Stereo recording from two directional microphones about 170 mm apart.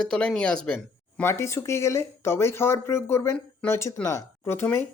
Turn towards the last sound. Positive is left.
turn(degrees=15)  # may be behind; listen again after turning